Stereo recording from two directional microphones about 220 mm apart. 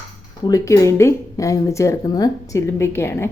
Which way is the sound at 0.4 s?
15° left (ahead or behind).